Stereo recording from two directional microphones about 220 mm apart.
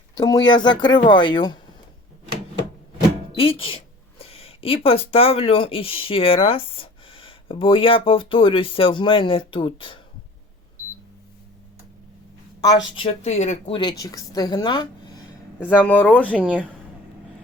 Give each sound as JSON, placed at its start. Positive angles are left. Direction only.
{"t": 0.2, "sound": "speech", "side_deg": 20}
{"t": 3.3, "sound": "speech", "side_deg": 25}
{"t": 12.6, "sound": "speech", "side_deg": 25}
{"t": 15.6, "sound": "speech", "side_deg": 5}
{"t": 16.4, "sound": "a woman's voice", "side_deg": -5}